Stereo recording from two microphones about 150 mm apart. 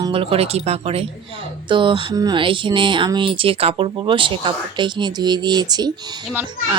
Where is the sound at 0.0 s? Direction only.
40° right (ahead or behind).